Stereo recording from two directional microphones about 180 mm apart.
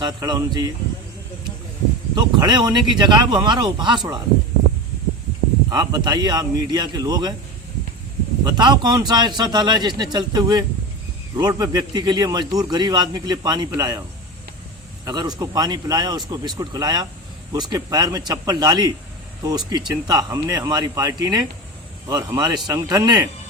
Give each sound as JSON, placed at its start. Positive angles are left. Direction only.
{"t": 0.0, "sound": "a man's voice", "side_deg": -20}
{"t": 2.1, "sound": "a man's voice", "side_deg": -25}
{"t": 5.6, "sound": "a man's voice", "side_deg": -20}
{"t": 8.4, "sound": "a man's voice", "side_deg": -25}
{"t": 15.0, "sound": "a man's voice", "side_deg": -25}